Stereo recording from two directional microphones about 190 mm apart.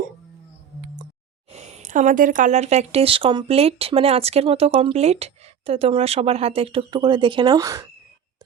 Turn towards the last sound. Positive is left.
turn(degrees=-20)  # may be behind; listen again after turning